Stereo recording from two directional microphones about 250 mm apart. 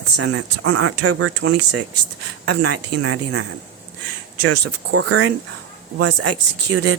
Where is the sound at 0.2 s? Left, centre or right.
Right.